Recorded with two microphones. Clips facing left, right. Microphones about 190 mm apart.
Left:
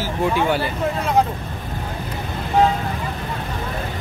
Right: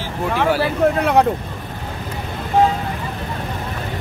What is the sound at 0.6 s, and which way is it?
Speech, 70° right (ahead or behind).